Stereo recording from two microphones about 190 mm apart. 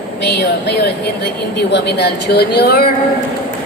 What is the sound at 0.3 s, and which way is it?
A woman's voice, 60° left (ahead or behind).